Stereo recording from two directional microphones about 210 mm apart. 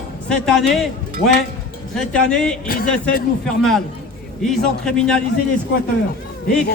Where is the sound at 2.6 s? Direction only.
45° left (ahead or behind).